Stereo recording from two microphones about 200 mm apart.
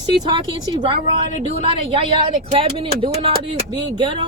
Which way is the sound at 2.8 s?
25° right (ahead or behind).